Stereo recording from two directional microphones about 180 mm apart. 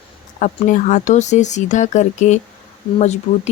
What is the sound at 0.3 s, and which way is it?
Speech, 45° left (ahead or behind).